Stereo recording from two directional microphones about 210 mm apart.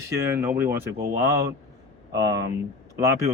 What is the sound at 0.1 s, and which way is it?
Speech, 15° right (ahead or behind).